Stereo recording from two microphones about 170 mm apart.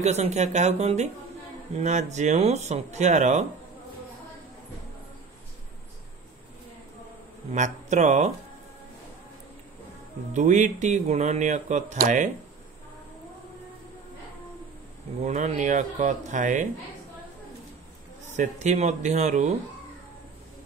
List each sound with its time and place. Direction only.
0.0 s speech: 40° right (ahead or behind)
7.5 s speech: 45° right (ahead or behind)
10.3 s speech: 45° right (ahead or behind)
15.2 s speech: 45° right (ahead or behind)
18.2 s speech: 45° right (ahead or behind)